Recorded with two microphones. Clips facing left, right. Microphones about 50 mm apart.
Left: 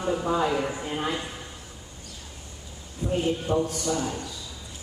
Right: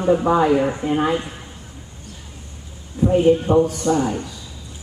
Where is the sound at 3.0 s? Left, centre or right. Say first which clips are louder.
Right 11 dB; right.